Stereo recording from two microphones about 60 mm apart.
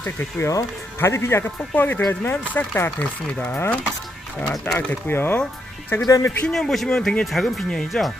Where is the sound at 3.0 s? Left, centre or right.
Centre.